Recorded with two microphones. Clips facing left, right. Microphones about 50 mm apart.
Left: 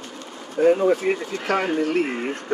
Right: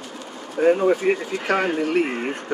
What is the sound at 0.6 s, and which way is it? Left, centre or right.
Speech, centre.